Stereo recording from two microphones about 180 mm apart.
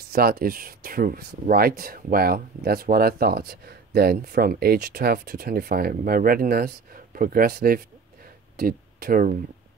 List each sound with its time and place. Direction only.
0.0 s speech: 55° right (ahead or behind)